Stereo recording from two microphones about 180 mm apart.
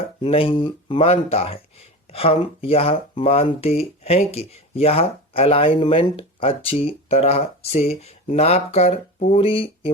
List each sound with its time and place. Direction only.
0.2 s speech: 30° left (ahead or behind)